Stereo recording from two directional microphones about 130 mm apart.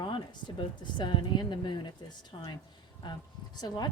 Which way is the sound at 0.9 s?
35° left (ahead or behind).